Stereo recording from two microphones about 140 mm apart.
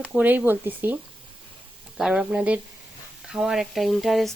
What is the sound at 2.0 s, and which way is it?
Speech, 5° right (ahead or behind).